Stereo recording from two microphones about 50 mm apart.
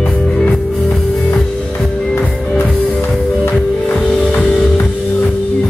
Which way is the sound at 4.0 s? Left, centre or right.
Centre.